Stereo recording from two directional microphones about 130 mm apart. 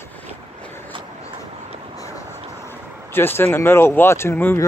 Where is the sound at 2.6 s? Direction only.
15° left (ahead or behind).